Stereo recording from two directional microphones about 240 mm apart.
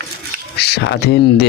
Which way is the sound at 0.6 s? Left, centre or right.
Left.